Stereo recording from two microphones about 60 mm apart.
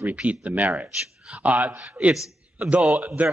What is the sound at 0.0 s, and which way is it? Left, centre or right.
Speech, right.